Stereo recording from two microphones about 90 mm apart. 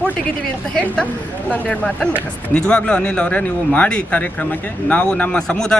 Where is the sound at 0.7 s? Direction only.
10° left (ahead or behind).